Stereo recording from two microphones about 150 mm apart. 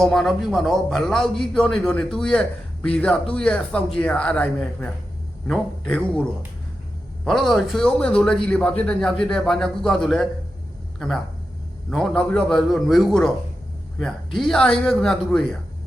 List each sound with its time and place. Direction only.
0.0 s a man's voice: centre (ahead or behind)
7.3 s a man's voice: centre (ahead or behind)
11.9 s a man's voice: centre (ahead or behind)
14.3 s a man's voice: 5° left (ahead or behind)